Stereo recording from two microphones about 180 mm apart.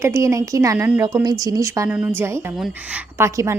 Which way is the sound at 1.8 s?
5° right (ahead or behind).